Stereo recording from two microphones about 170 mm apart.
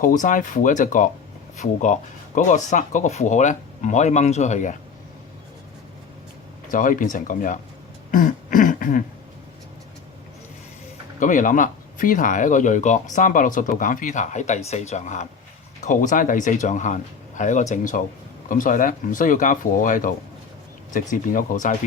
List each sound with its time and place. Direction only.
0.0 s speech: 50° left (ahead or behind)
6.7 s speech: 50° left (ahead or behind)
8.1 s throat clearing: 50° left (ahead or behind)
11.2 s speech: 50° left (ahead or behind)